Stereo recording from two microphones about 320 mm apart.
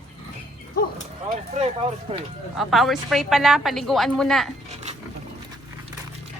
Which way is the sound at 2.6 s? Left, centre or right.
Centre.